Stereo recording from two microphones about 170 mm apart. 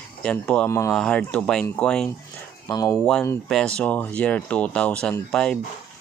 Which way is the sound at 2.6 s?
20° left (ahead or behind).